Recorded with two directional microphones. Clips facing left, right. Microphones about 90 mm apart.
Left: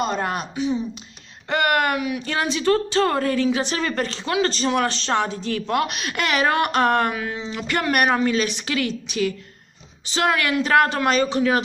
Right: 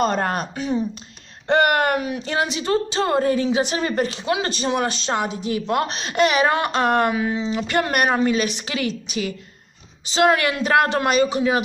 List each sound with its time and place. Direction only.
0.0 s speech: 45° right (ahead or behind)
1.5 s speech: 25° right (ahead or behind)
5.8 s speech: 30° right (ahead or behind)